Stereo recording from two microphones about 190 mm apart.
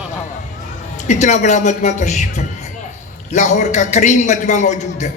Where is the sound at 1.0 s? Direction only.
40° left (ahead or behind).